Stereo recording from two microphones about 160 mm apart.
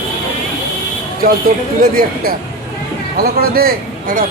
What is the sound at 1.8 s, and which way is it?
A man's voice, 65° right (ahead or behind).